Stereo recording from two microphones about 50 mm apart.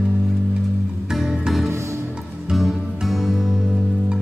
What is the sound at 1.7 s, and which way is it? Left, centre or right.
Music, right.